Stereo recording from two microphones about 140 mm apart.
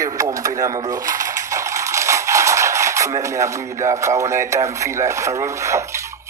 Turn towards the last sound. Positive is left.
turn(degrees=-20)  # may be behind; listen again after turning